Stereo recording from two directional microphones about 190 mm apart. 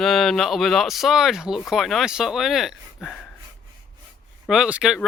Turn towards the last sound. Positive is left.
turn(degrees=-5)  # may be behind; listen again after turning